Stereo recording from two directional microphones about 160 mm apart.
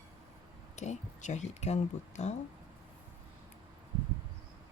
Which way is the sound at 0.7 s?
45° left (ahead or behind).